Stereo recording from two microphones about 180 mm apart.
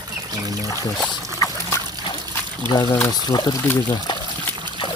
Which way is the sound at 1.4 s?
20° left (ahead or behind).